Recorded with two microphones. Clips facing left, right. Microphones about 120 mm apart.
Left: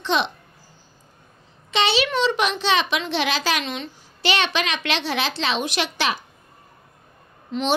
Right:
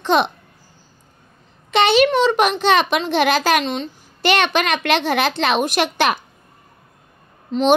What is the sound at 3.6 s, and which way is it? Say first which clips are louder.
Speech: right 6 dB; 40° right (ahead or behind).